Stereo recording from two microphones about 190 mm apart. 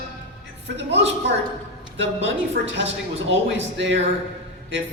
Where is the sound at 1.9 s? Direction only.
70° right (ahead or behind).